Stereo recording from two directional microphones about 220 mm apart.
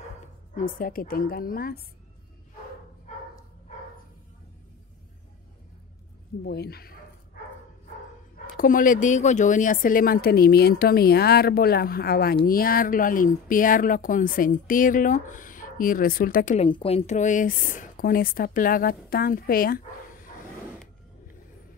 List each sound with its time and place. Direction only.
0.7 s speech: 40° left (ahead or behind)
6.4 s a woman's voice: 45° left (ahead or behind)
8.5 s a woman's voice: 40° left (ahead or behind)
16.6 s speech: 25° left (ahead or behind); by 19.8 s 40° left (ahead or behind)